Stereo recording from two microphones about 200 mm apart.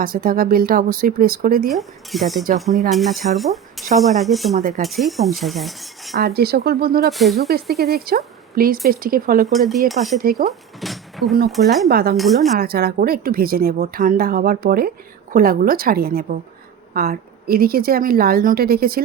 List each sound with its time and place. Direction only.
0.0 s speech: 45° right (ahead or behind)
1.7 s cutlery: centre (ahead or behind)
3.3 s speech: centre (ahead or behind)
3.9 s cutlery: centre (ahead or behind)
6.1 s speech: 50° right (ahead or behind)
7.1 s cutlery: centre (ahead or behind)
7.3 s speech: 50° right (ahead or behind)
9.5 s cutlery: centre (ahead or behind)
10.2 s speech: 50° right (ahead or behind)
10.8 s a sound: centre (ahead or behind)
11.5 s cutlery: centre (ahead or behind)
11.9 s speech: 50° right (ahead or behind)
12.1 s cutlery: centre (ahead or behind)
12.5 s speech: 50° right (ahead or behind)